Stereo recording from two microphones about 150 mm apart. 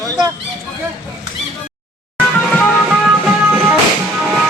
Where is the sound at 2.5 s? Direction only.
5° left (ahead or behind).